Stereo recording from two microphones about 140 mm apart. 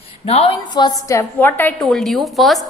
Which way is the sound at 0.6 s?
30° left (ahead or behind).